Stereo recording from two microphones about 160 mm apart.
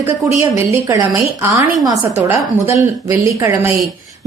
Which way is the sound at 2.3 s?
15° right (ahead or behind).